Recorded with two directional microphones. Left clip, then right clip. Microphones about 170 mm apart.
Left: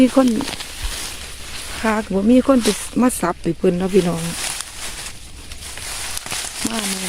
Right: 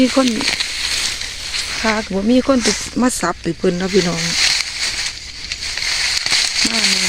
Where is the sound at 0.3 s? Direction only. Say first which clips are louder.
Right 4 dB; 30° left (ahead or behind).